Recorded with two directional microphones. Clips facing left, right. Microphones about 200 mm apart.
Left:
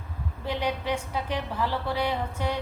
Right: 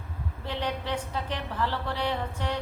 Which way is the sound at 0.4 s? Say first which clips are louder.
Left 3 dB; 10° left (ahead or behind).